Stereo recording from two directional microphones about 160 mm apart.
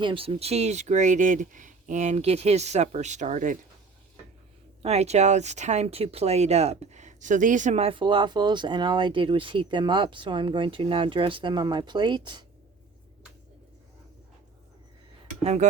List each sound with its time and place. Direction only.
0.0 s speech: 35° right (ahead or behind); by 3.6 s 55° right (ahead or behind)
4.8 s speech: 40° right (ahead or behind)